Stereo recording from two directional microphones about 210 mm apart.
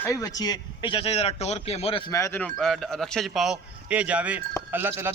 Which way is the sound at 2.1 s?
10° left (ahead or behind).